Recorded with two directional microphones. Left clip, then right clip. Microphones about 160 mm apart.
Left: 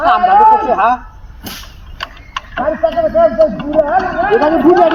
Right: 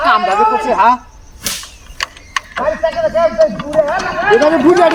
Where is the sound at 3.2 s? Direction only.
35° right (ahead or behind).